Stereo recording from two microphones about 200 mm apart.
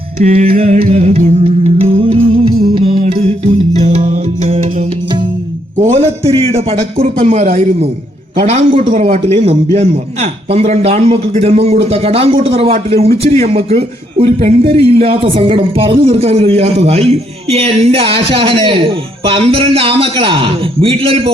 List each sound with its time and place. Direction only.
0.2 s music: 30° right (ahead or behind)
5.7 s a sound: 35° right (ahead or behind)
6.5 s a man's voice: 30° right (ahead or behind)
8.4 s a man's voice: 35° right (ahead or behind)